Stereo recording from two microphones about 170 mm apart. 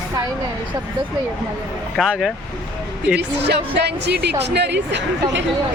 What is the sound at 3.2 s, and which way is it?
Speech, 85° right.